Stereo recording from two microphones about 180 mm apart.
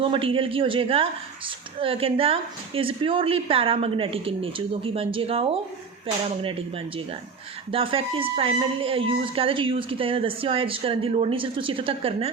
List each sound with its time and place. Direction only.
0.0 s a man's voice: 30° right (ahead or behind)